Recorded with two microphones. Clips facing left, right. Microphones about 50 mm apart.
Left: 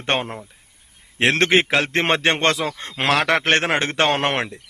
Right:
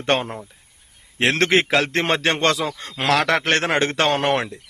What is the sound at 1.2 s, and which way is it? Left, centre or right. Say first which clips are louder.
A man's voice: left 1 dB; left.